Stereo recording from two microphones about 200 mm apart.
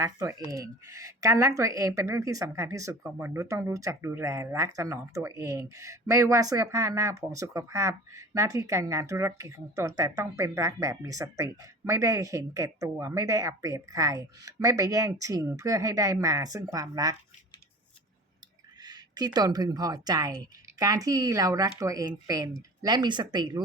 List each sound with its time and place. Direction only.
0.0 s speech: 15° right (ahead or behind)
18.8 s a woman's voice: 20° right (ahead or behind)